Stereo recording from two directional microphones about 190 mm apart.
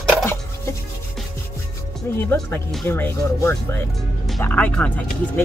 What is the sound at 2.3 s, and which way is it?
Speech, 10° left (ahead or behind).